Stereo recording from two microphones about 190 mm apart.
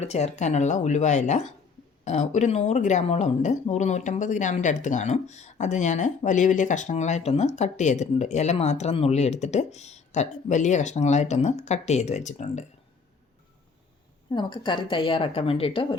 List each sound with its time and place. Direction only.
0.0 s a woman's voice: 35° left (ahead or behind)
14.3 s a woman's voice: 25° left (ahead or behind)